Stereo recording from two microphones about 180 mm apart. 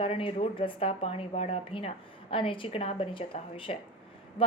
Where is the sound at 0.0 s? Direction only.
30° left (ahead or behind).